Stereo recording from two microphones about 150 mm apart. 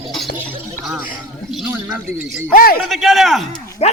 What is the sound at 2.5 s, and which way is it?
Speech, 75° left (ahead or behind).